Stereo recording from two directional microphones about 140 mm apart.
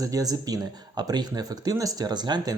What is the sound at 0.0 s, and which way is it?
Speech, 25° right (ahead or behind).